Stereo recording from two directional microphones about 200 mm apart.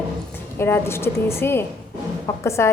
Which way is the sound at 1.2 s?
10° left (ahead or behind).